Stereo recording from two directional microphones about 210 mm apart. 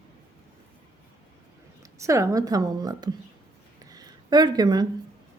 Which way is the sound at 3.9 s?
20° right (ahead or behind).